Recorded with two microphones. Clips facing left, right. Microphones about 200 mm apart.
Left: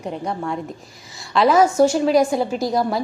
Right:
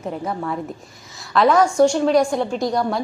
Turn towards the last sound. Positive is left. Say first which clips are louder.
# even
turn(degrees=0)  # may be behind; listen again after turning